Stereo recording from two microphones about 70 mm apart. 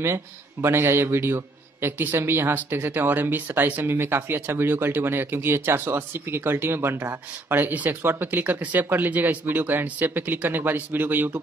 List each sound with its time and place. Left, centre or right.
0.0 s a man's voice: right